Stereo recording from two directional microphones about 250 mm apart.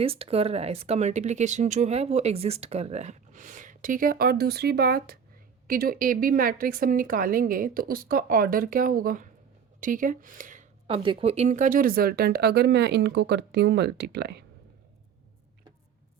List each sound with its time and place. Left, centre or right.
0.0 s a woman's voice: right